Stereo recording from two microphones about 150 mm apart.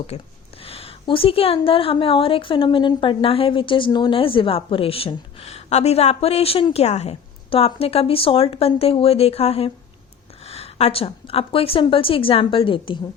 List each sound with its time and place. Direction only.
0.1 s speech: 45° left (ahead or behind)